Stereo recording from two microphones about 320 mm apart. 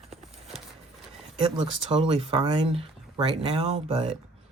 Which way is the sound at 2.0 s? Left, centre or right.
Centre.